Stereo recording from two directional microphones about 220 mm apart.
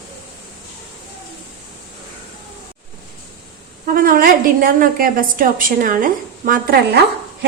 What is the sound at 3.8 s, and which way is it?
A woman's voice, 40° right (ahead or behind).